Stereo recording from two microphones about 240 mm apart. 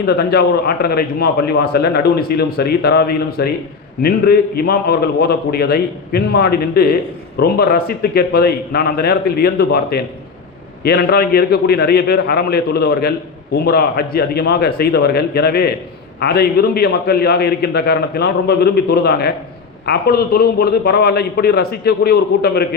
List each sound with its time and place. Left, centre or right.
0.0 s a man's voice: left